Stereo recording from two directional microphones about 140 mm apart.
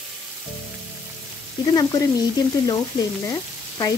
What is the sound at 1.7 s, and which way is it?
Speech, 30° left (ahead or behind).